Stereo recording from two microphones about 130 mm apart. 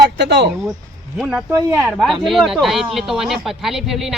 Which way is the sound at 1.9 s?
Centre (ahead or behind).